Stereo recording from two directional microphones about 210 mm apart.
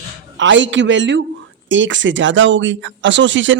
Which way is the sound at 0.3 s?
60° right (ahead or behind).